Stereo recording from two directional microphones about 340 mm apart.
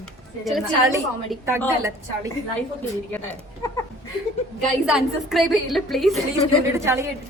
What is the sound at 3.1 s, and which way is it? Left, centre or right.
Speech, centre.